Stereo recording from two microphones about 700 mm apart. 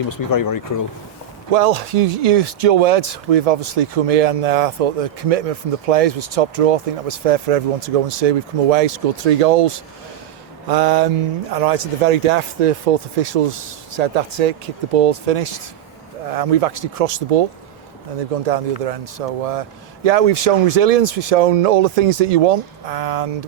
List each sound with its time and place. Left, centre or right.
0.1 s speech: left
1.5 s speech: right